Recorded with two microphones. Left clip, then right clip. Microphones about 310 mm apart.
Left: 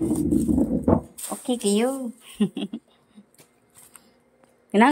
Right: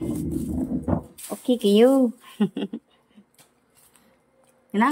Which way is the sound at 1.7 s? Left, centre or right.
Right.